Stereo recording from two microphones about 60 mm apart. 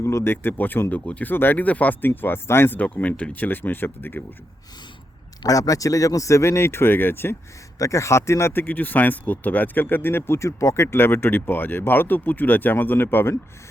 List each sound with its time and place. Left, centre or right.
0.0 s speech: left
1.3 s speech: left
2.7 s speech: left
5.5 s speech: left
7.8 s speech: left
8.5 s speech: left
10.9 s speech: left